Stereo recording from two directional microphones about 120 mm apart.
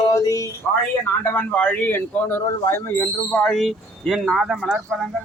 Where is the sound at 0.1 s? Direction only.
25° left (ahead or behind).